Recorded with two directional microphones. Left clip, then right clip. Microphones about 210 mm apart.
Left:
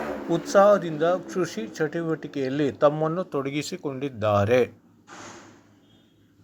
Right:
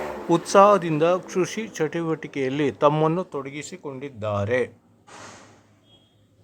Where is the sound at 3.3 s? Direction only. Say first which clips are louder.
Left 4 dB; 10° left (ahead or behind).